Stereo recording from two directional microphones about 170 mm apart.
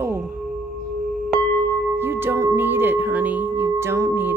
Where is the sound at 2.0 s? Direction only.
15° right (ahead or behind).